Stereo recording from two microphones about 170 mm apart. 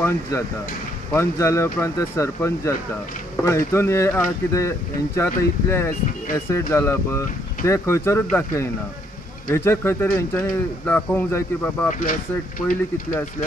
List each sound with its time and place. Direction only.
0.0 s speech: 15° left (ahead or behind)
11.9 s speech: 50° left (ahead or behind)